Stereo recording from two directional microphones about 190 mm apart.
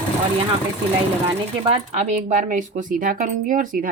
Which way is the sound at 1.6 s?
35° right (ahead or behind).